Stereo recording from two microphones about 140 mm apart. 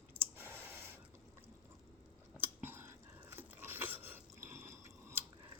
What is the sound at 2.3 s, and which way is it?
Chewing, 15° right (ahead or behind).